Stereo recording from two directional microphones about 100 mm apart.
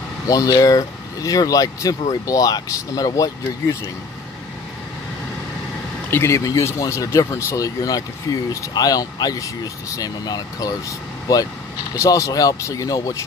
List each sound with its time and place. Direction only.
0.3 s speech: 35° left (ahead or behind)
6.0 s speech: 25° left (ahead or behind)
11.9 s speech: 35° left (ahead or behind)